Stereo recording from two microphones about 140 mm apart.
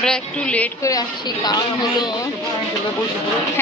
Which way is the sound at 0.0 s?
5° left (ahead or behind).